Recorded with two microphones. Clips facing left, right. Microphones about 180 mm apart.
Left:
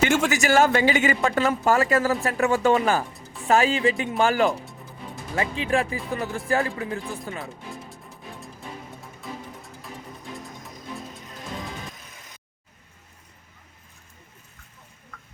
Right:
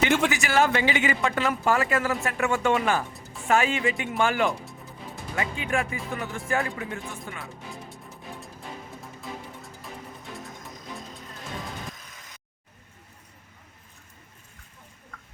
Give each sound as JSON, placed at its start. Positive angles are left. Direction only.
{"t": 0.3, "sound": "speech", "side_deg": 45}